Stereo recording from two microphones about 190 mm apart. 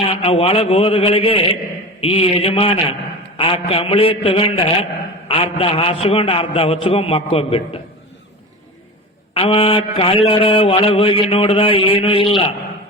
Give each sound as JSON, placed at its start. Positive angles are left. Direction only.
{"t": 0.1, "sound": "mantra", "side_deg": 30}
{"t": 2.0, "sound": "a man's voice", "side_deg": 30}
{"t": 3.3, "sound": "mantra", "side_deg": 30}
{"t": 9.3, "sound": "mantra", "side_deg": 30}